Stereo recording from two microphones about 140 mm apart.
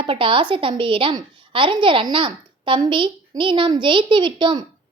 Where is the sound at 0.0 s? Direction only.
40° right (ahead or behind).